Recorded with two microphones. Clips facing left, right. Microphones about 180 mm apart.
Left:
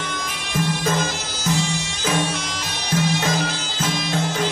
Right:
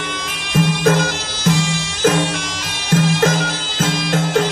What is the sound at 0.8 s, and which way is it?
Bagpipes, 65° right (ahead or behind).